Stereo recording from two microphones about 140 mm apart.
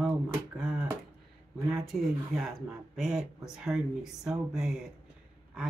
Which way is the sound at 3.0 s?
5° right (ahead or behind).